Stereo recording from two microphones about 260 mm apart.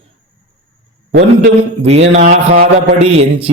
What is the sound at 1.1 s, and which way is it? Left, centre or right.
Speech, right.